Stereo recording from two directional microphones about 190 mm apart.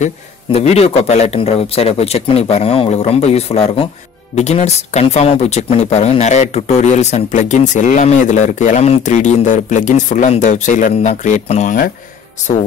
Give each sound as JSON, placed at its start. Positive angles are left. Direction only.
{"t": 0.0, "sound": "speech", "side_deg": 35}